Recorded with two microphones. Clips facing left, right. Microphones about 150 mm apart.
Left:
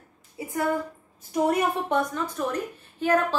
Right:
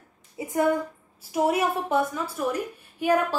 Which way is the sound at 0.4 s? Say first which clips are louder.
Right 2 dB; 25° right (ahead or behind).